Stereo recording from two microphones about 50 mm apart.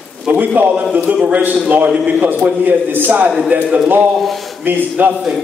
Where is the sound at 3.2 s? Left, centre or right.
Centre.